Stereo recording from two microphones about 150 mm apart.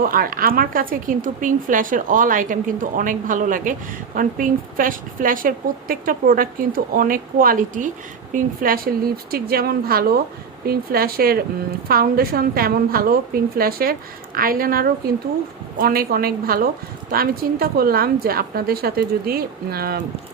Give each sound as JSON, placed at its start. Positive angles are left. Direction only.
{"t": 0.0, "sound": "a woman's voice", "side_deg": -70}
{"t": 14.3, "sound": "a woman's voice", "side_deg": -75}